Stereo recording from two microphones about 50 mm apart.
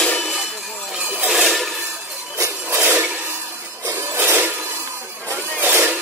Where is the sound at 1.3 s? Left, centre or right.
Centre.